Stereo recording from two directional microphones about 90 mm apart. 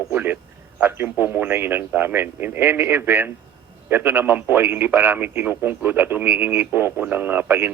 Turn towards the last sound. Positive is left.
turn(degrees=-25)  # may be behind; listen again after turning